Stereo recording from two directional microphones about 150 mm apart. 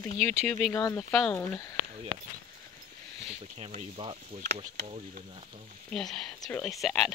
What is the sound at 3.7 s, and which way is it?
Speech, 40° right (ahead or behind).